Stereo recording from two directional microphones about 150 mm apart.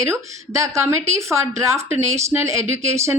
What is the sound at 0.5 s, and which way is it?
A woman's voice, 20° right (ahead or behind).